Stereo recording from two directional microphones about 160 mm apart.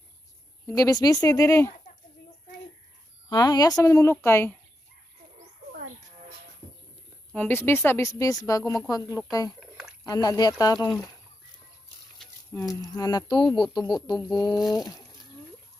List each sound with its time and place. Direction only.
0.7 s speech: 20° left (ahead or behind)
3.3 s speech: 25° left (ahead or behind)
7.3 s speech: 10° left (ahead or behind)
9.6 s a sound: 5° right (ahead or behind)
10.0 s speech: 20° left (ahead or behind)
12.5 s speech: 20° left (ahead or behind)
14.6 s speech: centre (ahead or behind)